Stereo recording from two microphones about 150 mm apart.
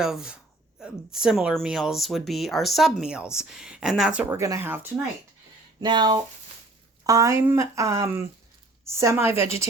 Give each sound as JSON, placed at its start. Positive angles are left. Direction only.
{"t": 0.0, "sound": "speech", "side_deg": -5}
{"t": 4.4, "sound": "a woman's voice", "side_deg": -20}
{"t": 5.8, "sound": "a woman's voice", "side_deg": -30}